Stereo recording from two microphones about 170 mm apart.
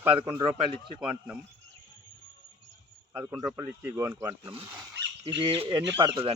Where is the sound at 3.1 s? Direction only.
20° right (ahead or behind).